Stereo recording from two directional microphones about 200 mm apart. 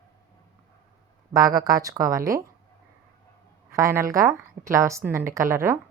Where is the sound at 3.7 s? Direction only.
15° right (ahead or behind).